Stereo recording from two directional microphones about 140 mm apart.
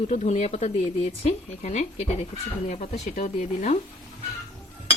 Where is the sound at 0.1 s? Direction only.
55° left (ahead or behind).